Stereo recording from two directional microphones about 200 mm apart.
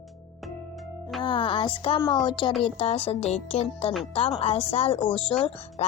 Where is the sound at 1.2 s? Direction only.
25° left (ahead or behind).